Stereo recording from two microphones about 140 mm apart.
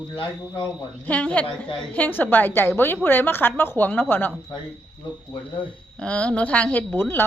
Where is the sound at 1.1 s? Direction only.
10° left (ahead or behind).